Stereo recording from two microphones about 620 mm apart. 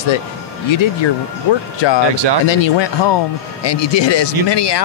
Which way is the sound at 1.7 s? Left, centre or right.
Left.